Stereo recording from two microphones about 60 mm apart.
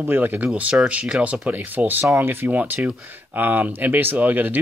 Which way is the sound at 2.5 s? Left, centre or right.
Right.